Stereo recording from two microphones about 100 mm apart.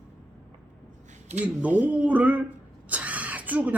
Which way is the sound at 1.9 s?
15° right (ahead or behind).